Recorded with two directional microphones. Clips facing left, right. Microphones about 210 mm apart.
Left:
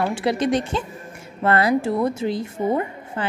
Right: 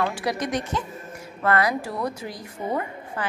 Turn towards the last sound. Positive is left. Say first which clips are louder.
# left 4 dB
turn(degrees=25)  # may be behind; listen again after turning